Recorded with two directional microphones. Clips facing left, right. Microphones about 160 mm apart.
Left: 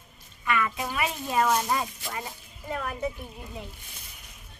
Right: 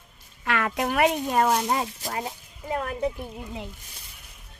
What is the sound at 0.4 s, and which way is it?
Speech, 85° right.